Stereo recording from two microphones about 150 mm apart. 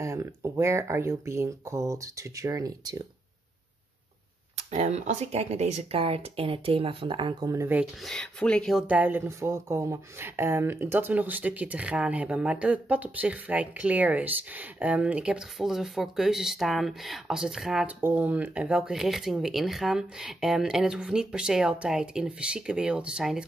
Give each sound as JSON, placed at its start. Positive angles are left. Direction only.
{"t": 0.0, "sound": "speech", "side_deg": -20}
{"t": 4.6, "sound": "speech", "side_deg": -50}
{"t": 7.5, "sound": "speech", "side_deg": -15}
{"t": 8.0, "sound": "speech", "side_deg": 5}
{"t": 8.8, "sound": "speech", "side_deg": -10}